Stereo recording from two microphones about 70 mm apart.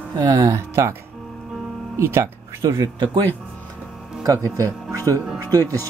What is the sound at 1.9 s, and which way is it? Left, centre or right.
Speech, right.